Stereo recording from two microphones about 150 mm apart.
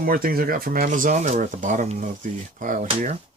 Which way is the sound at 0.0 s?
75° right (ahead or behind).